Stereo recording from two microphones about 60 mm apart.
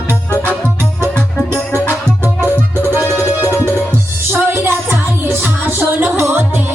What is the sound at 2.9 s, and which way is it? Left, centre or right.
Music, right.